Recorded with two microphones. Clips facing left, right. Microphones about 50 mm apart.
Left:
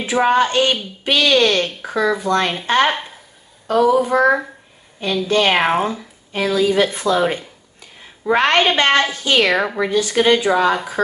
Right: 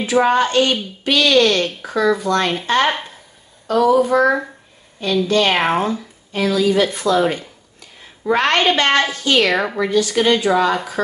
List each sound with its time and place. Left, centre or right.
0.0 s speech: centre
5.6 s speech: centre
6.3 s speech: left
9.5 s speech: centre
9.8 s speech: left